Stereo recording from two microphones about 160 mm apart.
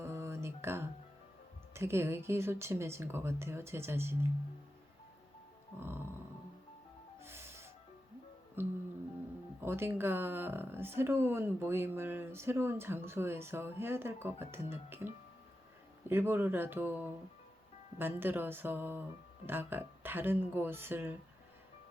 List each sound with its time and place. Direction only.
0.0 s a sound: 15° right (ahead or behind)
1.7 s speech: 15° right (ahead or behind)
7.2 s music: 15° right (ahead or behind)
9.6 s speech: 15° right (ahead or behind)